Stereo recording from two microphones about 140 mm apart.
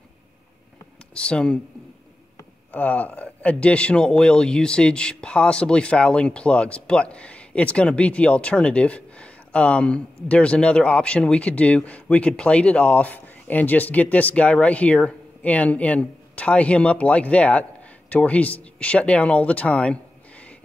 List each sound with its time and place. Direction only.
1.1 s speech: 5° left (ahead or behind)
2.7 s speech: 10° left (ahead or behind)